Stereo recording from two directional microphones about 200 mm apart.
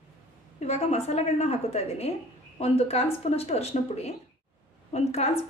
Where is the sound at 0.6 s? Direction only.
35° left (ahead or behind).